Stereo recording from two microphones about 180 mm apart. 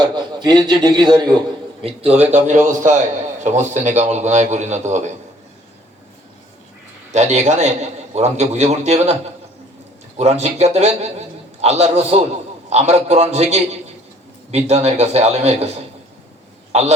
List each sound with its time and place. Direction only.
0.0 s a man's voice: 25° right (ahead or behind)
7.1 s a man's voice: 40° right (ahead or behind)
10.2 s a man's voice: 35° right (ahead or behind)